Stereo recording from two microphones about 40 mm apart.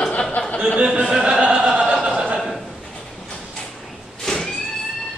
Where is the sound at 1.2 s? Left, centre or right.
Right.